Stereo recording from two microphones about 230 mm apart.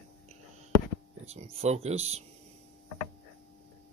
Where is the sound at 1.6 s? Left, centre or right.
Right.